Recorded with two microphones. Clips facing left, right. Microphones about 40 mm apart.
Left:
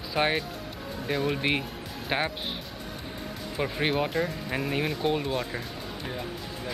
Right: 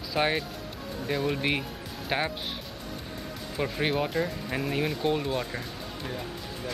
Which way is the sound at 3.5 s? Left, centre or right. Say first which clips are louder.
Left 1 dB; centre.